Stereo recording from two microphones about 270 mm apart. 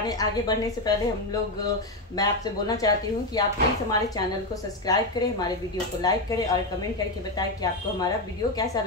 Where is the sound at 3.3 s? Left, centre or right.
Centre.